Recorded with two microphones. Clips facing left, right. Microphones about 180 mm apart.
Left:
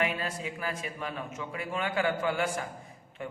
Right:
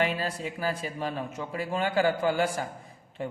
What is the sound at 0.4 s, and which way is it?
A man's voice, 35° right (ahead or behind).